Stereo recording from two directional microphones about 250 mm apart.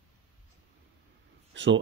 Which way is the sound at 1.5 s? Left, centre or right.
Right.